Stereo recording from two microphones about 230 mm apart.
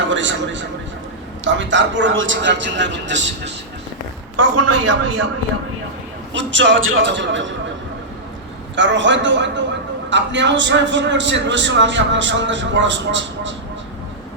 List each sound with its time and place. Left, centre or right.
0.1 s a man's voice: right
4.4 s a man's voice: right
6.3 s a man's voice: right
8.7 s a man's voice: right